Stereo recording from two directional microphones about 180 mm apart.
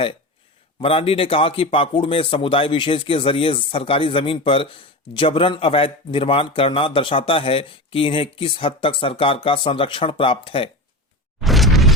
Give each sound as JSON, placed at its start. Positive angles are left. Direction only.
{"t": 0.8, "sound": "a man's voice", "side_deg": 30}
{"t": 11.3, "sound": "mechanisms", "side_deg": 0}